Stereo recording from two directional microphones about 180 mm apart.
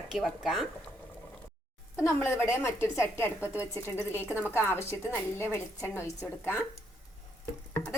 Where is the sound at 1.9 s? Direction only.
15° left (ahead or behind).